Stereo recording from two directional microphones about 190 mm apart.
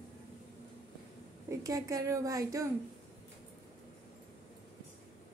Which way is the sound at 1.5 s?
15° right (ahead or behind).